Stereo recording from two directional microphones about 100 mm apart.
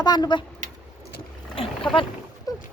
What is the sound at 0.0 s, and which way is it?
Speech, 45° left (ahead or behind).